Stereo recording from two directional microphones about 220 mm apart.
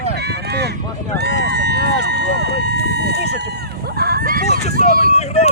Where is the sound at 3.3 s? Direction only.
50° right (ahead or behind).